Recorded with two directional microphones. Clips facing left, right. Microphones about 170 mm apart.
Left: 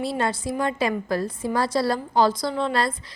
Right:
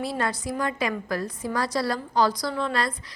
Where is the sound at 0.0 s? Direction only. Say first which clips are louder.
Left 3 dB; 25° left (ahead or behind).